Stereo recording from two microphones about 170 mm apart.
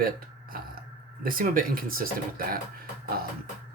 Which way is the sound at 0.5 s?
60° right (ahead or behind).